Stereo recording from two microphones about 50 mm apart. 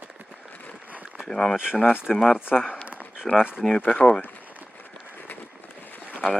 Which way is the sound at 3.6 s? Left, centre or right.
Centre.